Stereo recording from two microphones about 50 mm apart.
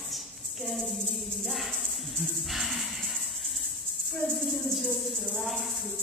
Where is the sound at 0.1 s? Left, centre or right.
Centre.